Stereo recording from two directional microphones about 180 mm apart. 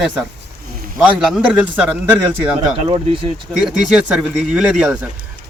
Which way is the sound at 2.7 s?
30° right (ahead or behind).